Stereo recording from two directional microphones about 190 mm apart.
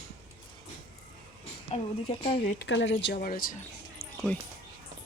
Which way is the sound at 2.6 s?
75° left (ahead or behind).